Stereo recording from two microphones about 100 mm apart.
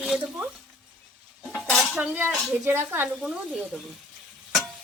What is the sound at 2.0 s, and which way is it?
A woman's voice, 15° right (ahead or behind).